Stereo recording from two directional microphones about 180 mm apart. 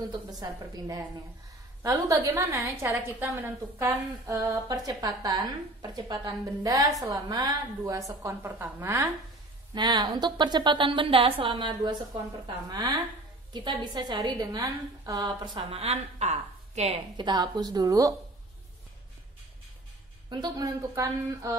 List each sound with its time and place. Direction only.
0.1 s a woman's voice: 20° right (ahead or behind)
9.8 s a woman's voice: 25° right (ahead or behind)
20.2 s a woman's voice: 25° right (ahead or behind)